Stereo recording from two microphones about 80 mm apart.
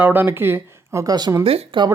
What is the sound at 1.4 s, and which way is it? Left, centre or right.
Speech, right.